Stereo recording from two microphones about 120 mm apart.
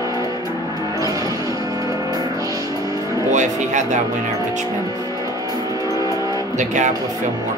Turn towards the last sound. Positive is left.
turn(degrees=-90)